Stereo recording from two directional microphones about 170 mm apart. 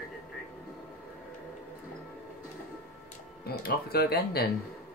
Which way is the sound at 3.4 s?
65° left (ahead or behind).